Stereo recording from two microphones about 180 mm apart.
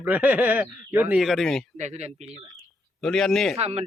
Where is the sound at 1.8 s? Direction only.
40° right (ahead or behind).